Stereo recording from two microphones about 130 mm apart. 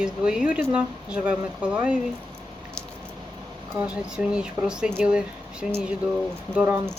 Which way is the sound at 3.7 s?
5° right (ahead or behind).